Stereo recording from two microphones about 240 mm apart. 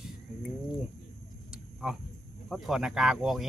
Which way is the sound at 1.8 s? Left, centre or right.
Centre.